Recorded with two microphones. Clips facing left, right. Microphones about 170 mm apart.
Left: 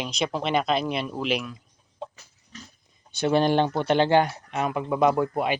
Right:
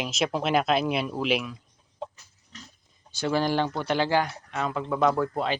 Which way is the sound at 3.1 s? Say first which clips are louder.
Left 4 dB; 20° left (ahead or behind).